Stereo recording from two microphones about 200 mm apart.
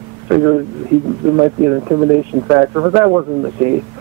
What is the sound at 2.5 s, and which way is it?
Speech, 20° right (ahead or behind).